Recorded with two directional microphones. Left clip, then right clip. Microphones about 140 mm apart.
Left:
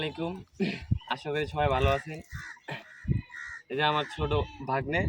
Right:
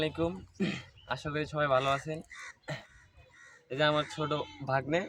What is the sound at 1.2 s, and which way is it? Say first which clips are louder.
Speech: left 3 dB; 15° right (ahead or behind).